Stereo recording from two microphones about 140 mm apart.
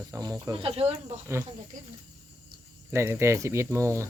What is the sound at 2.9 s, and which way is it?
Speech, 20° right (ahead or behind).